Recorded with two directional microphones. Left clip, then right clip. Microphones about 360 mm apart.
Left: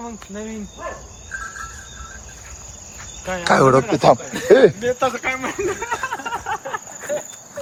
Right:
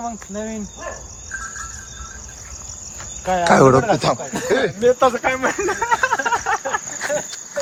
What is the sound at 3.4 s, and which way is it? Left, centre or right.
Speech, centre.